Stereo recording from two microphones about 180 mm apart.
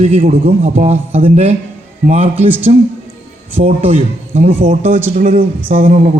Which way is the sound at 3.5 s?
35° right (ahead or behind).